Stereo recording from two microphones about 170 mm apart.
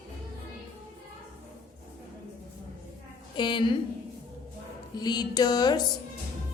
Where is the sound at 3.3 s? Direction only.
30° left (ahead or behind).